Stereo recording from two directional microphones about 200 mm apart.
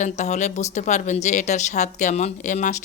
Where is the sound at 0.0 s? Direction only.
35° left (ahead or behind).